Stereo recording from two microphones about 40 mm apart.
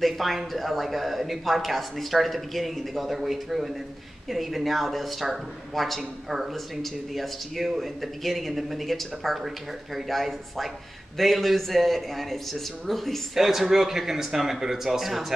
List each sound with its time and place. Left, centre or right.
0.0 s speech: centre
13.3 s speech: centre